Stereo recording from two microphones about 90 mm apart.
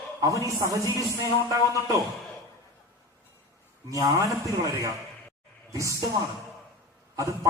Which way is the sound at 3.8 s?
40° right (ahead or behind).